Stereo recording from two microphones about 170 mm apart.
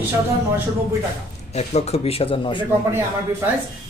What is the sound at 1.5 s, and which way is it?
Speech, 40° left (ahead or behind).